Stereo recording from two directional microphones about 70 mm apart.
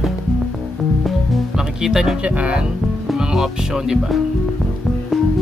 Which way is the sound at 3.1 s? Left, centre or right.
Centre.